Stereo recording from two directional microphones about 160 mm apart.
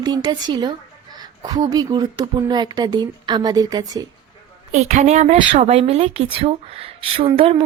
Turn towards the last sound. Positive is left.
turn(degrees=-35)  # may be behind; listen again after turning